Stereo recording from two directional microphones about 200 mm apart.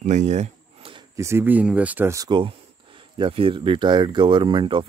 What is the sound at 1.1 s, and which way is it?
Speech, 15° right (ahead or behind).